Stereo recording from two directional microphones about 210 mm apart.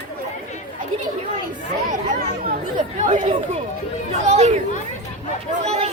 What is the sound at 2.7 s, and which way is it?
Chatter, 35° right (ahead or behind).